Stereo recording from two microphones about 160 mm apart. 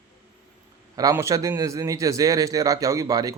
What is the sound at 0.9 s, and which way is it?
A man's voice, 20° right (ahead or behind).